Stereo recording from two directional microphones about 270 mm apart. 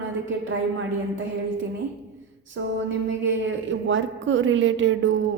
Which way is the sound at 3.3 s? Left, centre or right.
Right.